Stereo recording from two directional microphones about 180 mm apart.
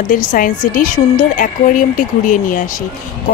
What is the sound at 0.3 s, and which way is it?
Speech, 50° left (ahead or behind).